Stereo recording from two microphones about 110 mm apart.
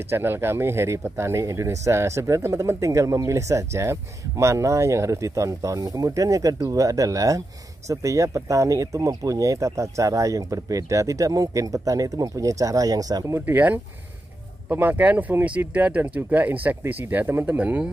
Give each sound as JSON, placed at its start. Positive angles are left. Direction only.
{"t": 0.1, "sound": "speech", "side_deg": -20}